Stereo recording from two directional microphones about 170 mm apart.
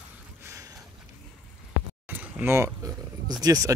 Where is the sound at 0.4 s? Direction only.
15° right (ahead or behind).